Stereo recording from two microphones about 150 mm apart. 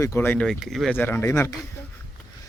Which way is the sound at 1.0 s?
15° left (ahead or behind).